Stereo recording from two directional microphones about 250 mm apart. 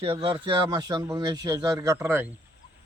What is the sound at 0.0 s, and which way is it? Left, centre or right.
A man's voice, right.